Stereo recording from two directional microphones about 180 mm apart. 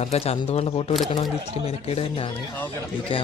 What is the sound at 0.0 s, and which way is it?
A man's voice, 35° left (ahead or behind).